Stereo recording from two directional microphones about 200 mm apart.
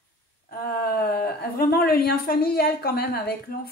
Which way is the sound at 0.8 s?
50° left (ahead or behind).